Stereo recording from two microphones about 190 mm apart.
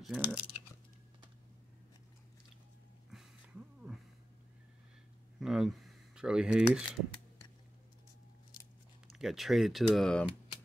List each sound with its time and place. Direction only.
0.0 s speech: centre (ahead or behind)
3.1 s a sound: centre (ahead or behind)
5.4 s speech: centre (ahead or behind)
9.0 s speech: centre (ahead or behind)